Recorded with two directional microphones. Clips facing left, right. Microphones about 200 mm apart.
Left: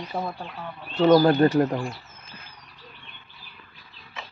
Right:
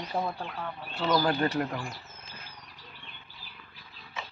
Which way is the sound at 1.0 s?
45° left (ahead or behind).